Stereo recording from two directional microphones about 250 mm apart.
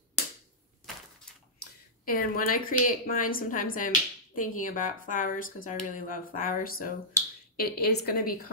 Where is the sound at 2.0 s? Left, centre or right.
Left.